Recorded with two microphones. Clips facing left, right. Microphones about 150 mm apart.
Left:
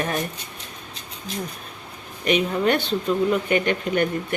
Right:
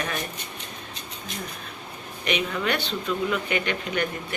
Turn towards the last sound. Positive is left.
turn(degrees=45)  # may be behind; listen again after turning